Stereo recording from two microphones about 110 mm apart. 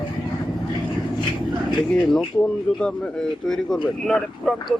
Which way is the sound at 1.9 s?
5° left (ahead or behind).